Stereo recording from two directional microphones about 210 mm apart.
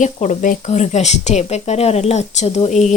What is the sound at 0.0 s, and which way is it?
Speech, 35° left (ahead or behind).